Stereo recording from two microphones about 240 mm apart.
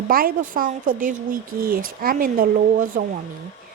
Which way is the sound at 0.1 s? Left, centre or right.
Right.